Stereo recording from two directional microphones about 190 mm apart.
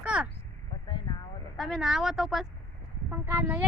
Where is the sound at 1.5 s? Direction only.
Centre (ahead or behind).